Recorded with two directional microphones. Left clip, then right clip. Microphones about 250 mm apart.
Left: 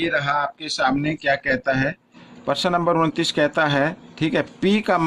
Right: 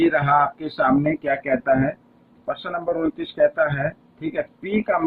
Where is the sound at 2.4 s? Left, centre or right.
Left.